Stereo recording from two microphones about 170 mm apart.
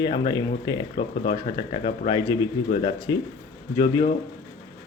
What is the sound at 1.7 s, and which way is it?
Speech, 30° left (ahead or behind).